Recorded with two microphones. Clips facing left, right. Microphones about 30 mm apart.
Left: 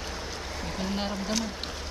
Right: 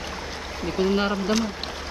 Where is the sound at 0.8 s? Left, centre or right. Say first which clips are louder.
Right 12 dB; right.